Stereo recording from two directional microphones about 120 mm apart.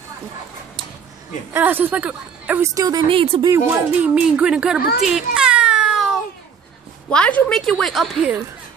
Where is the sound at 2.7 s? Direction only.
35° right (ahead or behind).